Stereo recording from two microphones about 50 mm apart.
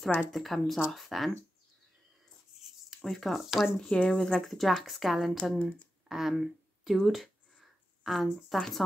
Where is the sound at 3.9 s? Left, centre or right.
Centre.